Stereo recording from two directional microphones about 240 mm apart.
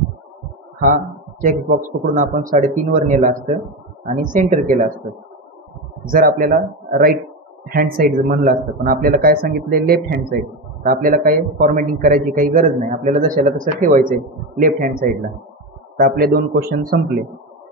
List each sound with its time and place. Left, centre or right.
1.4 s a man's voice: right
6.0 s a man's voice: right